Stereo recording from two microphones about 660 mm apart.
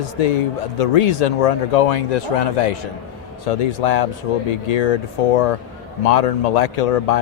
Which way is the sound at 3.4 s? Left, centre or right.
Left.